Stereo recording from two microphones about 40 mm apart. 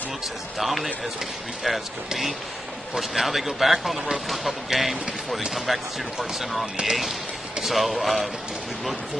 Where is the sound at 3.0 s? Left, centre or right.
Centre.